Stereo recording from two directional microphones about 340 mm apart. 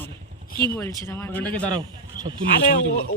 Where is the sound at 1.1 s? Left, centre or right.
Centre.